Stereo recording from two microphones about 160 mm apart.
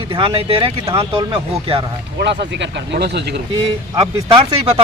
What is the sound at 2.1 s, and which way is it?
Speech, 90° right.